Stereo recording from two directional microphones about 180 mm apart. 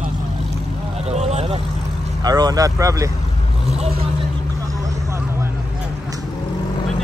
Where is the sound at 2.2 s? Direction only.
20° right (ahead or behind).